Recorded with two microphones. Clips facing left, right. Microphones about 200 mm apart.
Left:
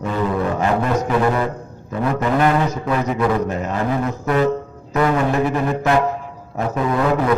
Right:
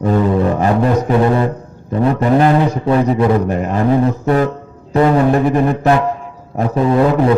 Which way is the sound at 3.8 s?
35° right (ahead or behind).